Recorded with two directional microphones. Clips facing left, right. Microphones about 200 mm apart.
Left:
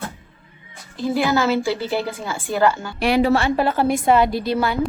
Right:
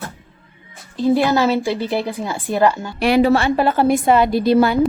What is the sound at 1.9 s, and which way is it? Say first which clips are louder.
Speech: right 2 dB; 15° right (ahead or behind).